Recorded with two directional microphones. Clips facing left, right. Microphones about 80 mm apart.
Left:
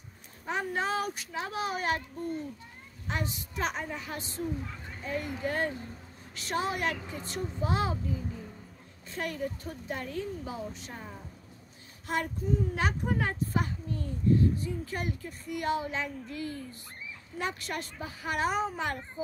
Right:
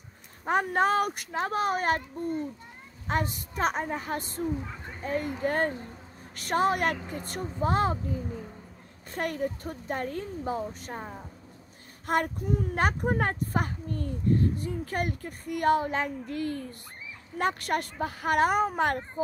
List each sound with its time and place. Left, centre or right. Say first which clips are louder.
0.5 s a woman's voice: right 7 dB; right
3.1 s a woman's voice: right 6 dB; right
4.6 s a child's voice: right 3 dB; right
5.0 s a woman's voice: right 4 dB; right
12.1 s a woman's voice: right 4 dB; right